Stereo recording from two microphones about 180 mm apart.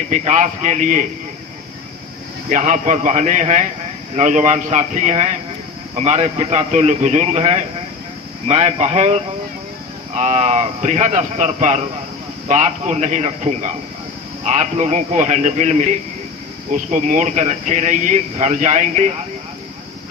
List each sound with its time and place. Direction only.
0.1 s a man's voice: 45° right (ahead or behind)
2.5 s a man's voice: 45° right (ahead or behind)